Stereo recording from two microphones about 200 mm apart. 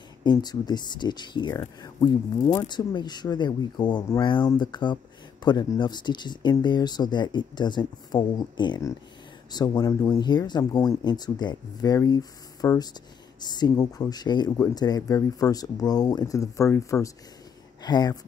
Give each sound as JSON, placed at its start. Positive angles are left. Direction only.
{"t": 0.2, "sound": "speech", "side_deg": 20}